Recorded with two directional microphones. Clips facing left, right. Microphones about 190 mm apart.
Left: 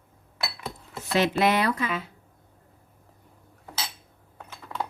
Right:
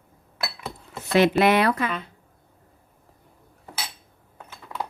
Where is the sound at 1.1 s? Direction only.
60° right (ahead or behind).